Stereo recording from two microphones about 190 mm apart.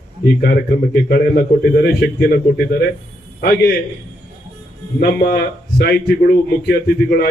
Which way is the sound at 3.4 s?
50° left (ahead or behind).